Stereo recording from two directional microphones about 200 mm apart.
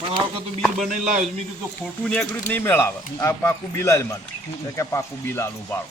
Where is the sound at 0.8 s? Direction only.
40° right (ahead or behind).